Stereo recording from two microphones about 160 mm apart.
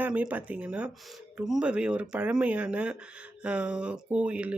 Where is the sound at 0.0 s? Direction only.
10° right (ahead or behind).